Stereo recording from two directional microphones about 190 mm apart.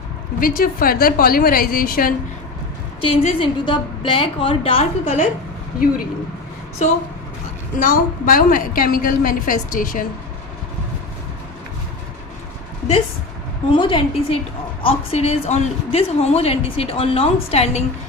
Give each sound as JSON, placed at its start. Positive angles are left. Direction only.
{"t": 0.3, "sound": "a woman's voice", "side_deg": 50}
{"t": 3.0, "sound": "a woman's voice", "side_deg": 30}
{"t": 6.8, "sound": "a woman's voice", "side_deg": 40}
{"t": 13.7, "sound": "a woman's voice", "side_deg": 25}